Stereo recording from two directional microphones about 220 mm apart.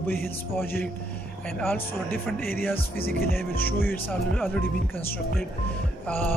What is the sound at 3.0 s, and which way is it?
Music, 45° left (ahead or behind).